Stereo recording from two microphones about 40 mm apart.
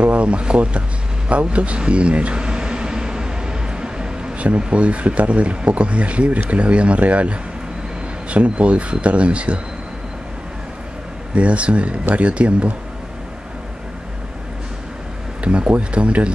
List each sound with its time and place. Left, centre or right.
0.0 s speech: right
1.3 s vehicle: right
4.6 s speech: right
11.3 s speech: right
15.4 s speech: right